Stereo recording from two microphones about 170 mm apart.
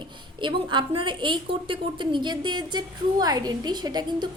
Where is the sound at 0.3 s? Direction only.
30° right (ahead or behind).